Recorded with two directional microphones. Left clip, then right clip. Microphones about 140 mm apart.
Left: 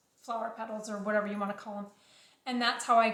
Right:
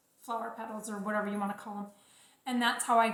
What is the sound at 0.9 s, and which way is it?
A woman's voice, 30° left (ahead or behind).